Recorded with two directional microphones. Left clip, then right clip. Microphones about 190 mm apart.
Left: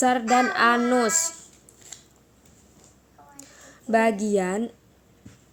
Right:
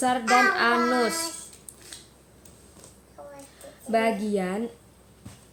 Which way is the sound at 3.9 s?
50° left (ahead or behind).